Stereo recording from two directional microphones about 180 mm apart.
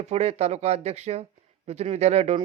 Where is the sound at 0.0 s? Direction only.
35° right (ahead or behind).